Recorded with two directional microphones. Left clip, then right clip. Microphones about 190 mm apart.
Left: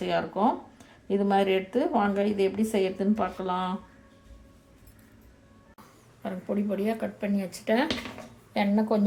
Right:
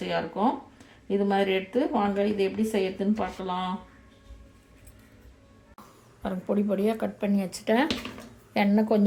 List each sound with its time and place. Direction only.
0.0 s speech: centre (ahead or behind)
6.2 s a woman's voice: 20° right (ahead or behind)